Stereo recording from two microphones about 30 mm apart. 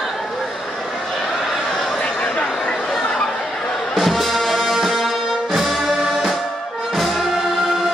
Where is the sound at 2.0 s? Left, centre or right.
Left.